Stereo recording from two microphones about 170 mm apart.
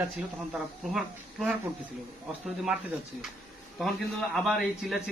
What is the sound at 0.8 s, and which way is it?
Speech, centre (ahead or behind).